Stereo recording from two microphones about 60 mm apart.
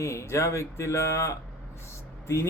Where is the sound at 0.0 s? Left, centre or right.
Left.